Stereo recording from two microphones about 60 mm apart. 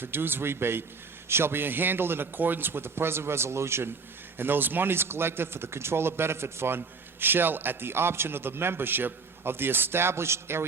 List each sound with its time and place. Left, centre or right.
0.0 s speech: right
4.4 s speech: right